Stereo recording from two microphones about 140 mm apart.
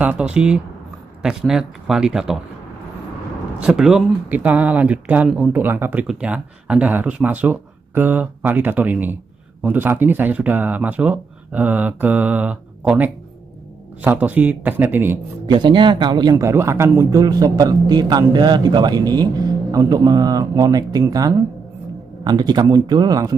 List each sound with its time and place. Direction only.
0.0 s a man's voice: 10° right (ahead or behind)
3.5 s speech: 5° right (ahead or behind)
15.4 s speech: 35° right (ahead or behind)